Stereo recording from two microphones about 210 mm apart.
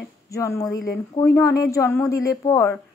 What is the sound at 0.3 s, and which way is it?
Speech, 15° left (ahead or behind).